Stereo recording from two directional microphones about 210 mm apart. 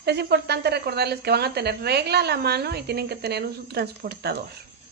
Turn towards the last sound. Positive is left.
turn(degrees=-50)  # may be behind; listen again after turning